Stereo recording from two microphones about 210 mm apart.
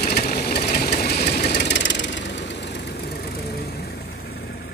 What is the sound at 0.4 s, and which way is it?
Engine, 50° left (ahead or behind).